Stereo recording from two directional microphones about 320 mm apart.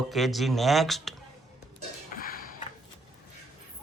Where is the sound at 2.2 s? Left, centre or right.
Left.